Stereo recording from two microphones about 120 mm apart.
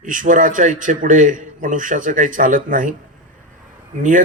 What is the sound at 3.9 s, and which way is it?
Speech, 90° right.